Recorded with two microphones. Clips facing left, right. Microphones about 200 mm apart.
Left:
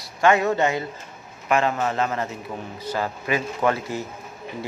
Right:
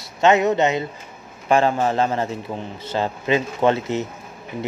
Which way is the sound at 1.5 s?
30° right (ahead or behind).